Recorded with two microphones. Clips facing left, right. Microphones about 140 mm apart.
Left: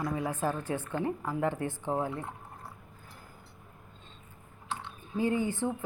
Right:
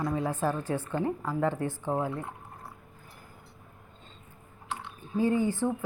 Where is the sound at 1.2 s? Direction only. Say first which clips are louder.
Right 2 dB; 15° left (ahead or behind).